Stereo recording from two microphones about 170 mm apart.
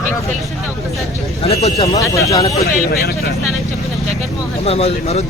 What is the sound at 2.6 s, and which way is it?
Speech, 65° left (ahead or behind).